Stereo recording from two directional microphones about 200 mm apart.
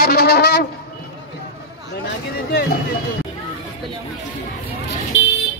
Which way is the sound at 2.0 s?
50° left (ahead or behind).